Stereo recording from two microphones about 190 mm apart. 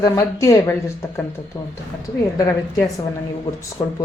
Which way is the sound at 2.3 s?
15° left (ahead or behind).